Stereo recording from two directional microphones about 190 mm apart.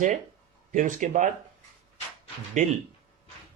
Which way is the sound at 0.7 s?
40° right (ahead or behind).